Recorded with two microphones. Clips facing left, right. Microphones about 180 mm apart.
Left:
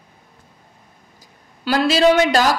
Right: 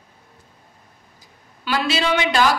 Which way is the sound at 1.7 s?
40° left (ahead or behind).